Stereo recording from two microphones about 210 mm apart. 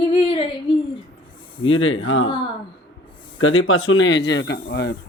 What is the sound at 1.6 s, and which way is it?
Speech, 70° left (ahead or behind).